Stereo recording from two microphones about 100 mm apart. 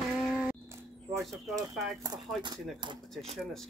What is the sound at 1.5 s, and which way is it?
Speech, 35° right (ahead or behind).